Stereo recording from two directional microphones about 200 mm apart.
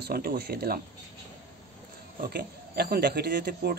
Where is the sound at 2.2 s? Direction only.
55° right (ahead or behind).